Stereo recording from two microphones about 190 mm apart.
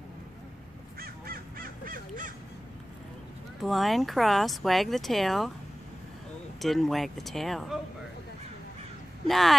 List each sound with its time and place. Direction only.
0.9 s crow: 50° right (ahead or behind)
3.6 s speech: centre (ahead or behind)
6.6 s speech: centre (ahead or behind)
9.3 s speech: centre (ahead or behind)